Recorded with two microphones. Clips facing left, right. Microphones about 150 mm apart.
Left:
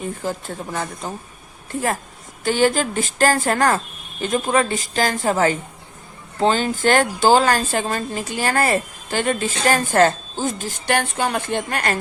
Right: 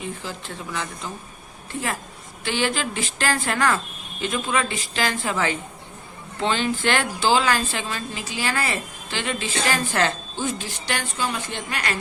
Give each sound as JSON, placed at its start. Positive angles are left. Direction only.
{"t": 0.0, "sound": "a woman's voice", "side_deg": 45}